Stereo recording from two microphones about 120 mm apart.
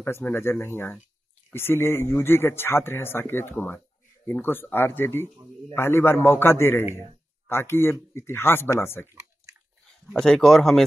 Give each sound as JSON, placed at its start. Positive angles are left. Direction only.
{"t": 0.0, "sound": "speech", "side_deg": 20}
{"t": 10.1, "sound": "speech", "side_deg": 5}